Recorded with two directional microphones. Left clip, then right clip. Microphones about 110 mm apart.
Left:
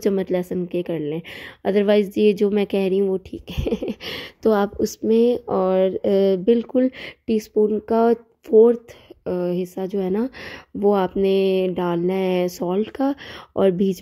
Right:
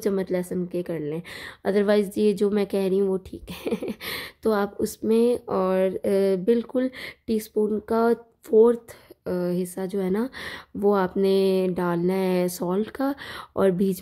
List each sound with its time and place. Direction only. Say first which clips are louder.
0.0 s a woman's voice: left 4 dB; 35° left (ahead or behind)
8.5 s speech: left 4 dB; 15° left (ahead or behind)
9.2 s speech: left 3 dB; 30° left (ahead or behind)